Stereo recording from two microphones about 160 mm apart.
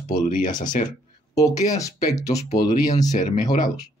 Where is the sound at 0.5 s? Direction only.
25° left (ahead or behind).